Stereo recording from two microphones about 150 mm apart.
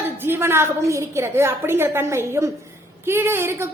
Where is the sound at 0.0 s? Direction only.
15° right (ahead or behind).